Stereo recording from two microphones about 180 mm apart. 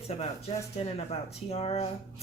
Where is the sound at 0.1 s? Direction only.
35° left (ahead or behind).